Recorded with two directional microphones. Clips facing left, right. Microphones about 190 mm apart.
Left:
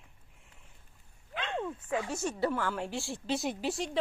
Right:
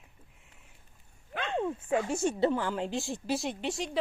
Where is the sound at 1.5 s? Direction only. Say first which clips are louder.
Right 5 dB; 25° right (ahead or behind).